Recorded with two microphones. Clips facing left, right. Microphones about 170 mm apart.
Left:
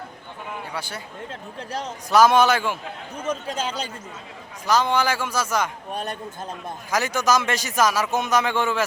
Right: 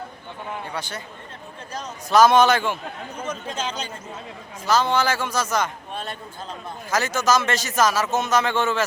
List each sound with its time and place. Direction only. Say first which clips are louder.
0.7 s a man's voice: right 1 dB; 10° left (ahead or behind)
2.0 s a man's voice: right 1 dB; 10° left (ahead or behind)
3.4 s a man's voice: left 1 dB; 35° left (ahead or behind)
4.6 s a man's voice: even; 15° left (ahead or behind)
5.9 s a man's voice: left 3 dB; 45° left (ahead or behind)
6.9 s a man's voice: even; 15° left (ahead or behind)